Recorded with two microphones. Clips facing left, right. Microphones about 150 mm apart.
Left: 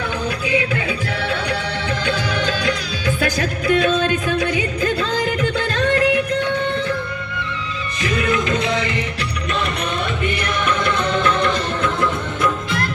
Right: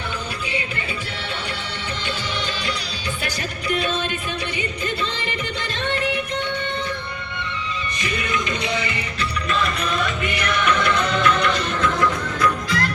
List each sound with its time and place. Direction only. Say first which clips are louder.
3.7 s music: left 7 dB; 90° left
8.0 s music: left 7 dB; 90° left
10.2 s music: left 1 dB; 50° left (ahead or behind)
11.0 s music: left 2 dB; 25° left (ahead or behind)